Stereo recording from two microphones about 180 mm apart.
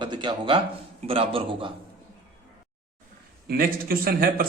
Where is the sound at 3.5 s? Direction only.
55° right (ahead or behind).